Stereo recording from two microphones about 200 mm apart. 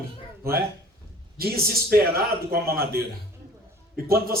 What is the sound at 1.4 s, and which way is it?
A man's voice, 50° right (ahead or behind).